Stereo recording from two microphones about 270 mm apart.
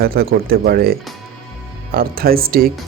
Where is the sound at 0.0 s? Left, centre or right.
Right.